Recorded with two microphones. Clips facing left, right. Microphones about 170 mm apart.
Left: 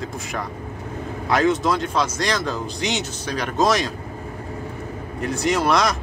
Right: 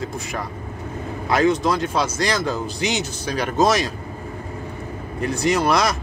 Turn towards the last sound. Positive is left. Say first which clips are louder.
# right 1 dB
turn(degrees=-5)  # may be behind; listen again after turning